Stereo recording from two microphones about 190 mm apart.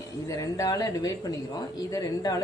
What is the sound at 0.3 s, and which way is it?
A woman's voice, 15° left (ahead or behind).